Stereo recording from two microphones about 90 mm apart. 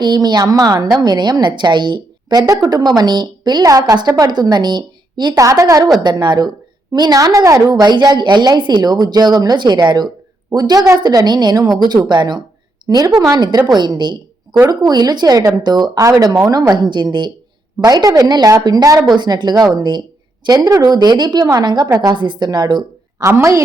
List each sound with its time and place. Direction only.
0.0 s a woman's voice: 55° right (ahead or behind)
2.5 s a woman's voice: 45° right (ahead or behind)
5.4 s a woman's voice: 35° right (ahead or behind)
6.0 s a woman's voice: 55° right (ahead or behind)
17.8 s a woman's voice: 45° right (ahead or behind)
19.1 s a woman's voice: 55° right (ahead or behind)
23.2 s a woman's voice: 30° right (ahead or behind)